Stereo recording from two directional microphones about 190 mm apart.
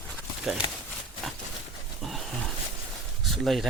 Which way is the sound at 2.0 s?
Centre (ahead or behind).